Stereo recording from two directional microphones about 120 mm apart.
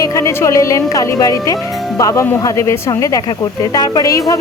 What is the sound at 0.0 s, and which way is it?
A woman's voice, 25° left (ahead or behind).